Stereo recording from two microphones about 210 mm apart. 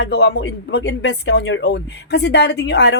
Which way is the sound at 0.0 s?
55° left (ahead or behind).